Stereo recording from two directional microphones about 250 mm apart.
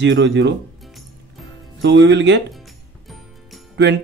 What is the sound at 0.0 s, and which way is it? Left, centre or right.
Speech, right.